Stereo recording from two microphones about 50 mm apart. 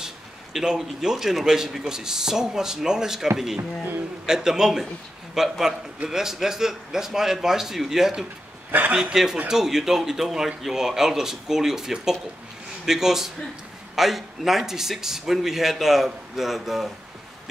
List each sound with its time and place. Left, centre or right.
0.0 s a man's voice: centre
4.3 s a man's voice: centre